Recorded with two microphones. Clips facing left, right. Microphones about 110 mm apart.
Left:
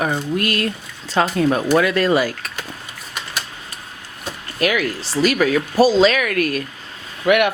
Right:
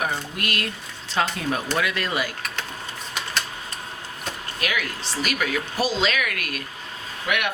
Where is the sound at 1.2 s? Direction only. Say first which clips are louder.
Left 8 dB; 40° left (ahead or behind).